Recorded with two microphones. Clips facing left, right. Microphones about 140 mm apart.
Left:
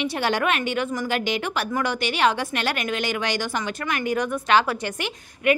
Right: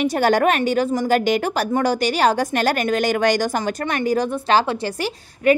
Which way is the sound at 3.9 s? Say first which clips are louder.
Right 3 dB; 35° right (ahead or behind).